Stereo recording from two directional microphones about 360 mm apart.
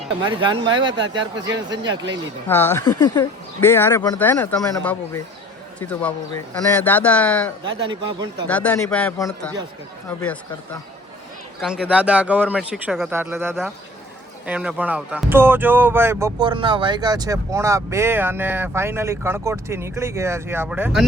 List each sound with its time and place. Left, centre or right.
0.2 s speech: centre
1.7 s speech: right
2.5 s speech: centre
7.6 s speech: centre
8.4 s speech: centre
11.6 s speech: centre